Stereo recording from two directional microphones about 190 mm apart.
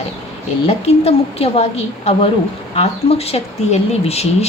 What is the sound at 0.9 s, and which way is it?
Speech, 30° left (ahead or behind).